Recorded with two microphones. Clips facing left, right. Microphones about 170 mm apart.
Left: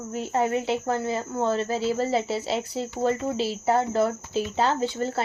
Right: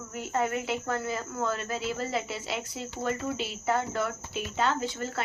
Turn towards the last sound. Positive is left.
turn(degrees=30)  # may be behind; listen again after turning